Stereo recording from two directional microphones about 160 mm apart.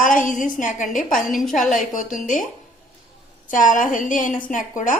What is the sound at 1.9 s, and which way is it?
Speech, 55° left (ahead or behind).